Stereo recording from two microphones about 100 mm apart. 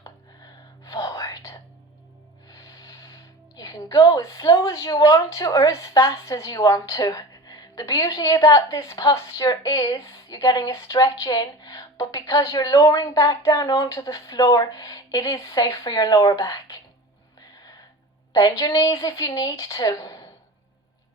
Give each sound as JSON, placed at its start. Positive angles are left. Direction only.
{"t": 0.9, "sound": "whispering", "side_deg": 40}
{"t": 2.5, "sound": "speech", "side_deg": 40}
{"t": 18.3, "sound": "speech", "side_deg": 40}